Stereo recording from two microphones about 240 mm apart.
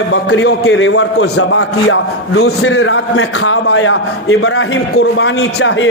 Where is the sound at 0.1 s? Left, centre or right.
Left.